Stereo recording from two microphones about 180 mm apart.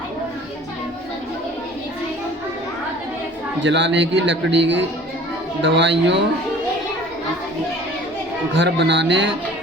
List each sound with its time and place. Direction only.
3.6 s a man's voice: 80° right
8.5 s speech: 75° right (ahead or behind)